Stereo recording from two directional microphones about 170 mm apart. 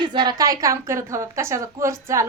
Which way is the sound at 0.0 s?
25° right (ahead or behind).